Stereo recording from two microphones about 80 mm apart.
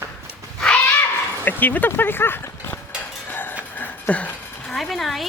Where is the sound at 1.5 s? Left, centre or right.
Left.